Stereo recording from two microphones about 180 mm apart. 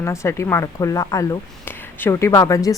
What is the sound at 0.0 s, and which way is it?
A woman's voice, 15° left (ahead or behind).